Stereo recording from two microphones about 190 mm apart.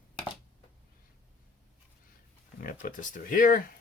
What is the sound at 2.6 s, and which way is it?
Speech, 45° left (ahead or behind).